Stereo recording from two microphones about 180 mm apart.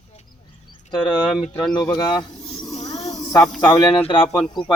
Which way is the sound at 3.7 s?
30° left (ahead or behind).